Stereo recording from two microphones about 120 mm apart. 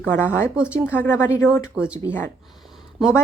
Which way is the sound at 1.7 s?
10° right (ahead or behind).